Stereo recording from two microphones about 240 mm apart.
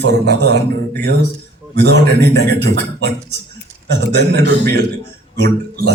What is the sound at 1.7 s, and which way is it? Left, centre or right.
A man's voice, right.